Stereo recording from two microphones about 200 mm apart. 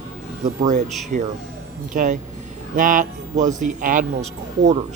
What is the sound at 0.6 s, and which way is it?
A man's voice, 35° right (ahead or behind).